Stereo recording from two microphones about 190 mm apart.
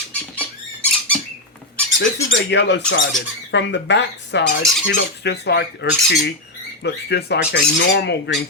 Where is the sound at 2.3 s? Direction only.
65° left (ahead or behind).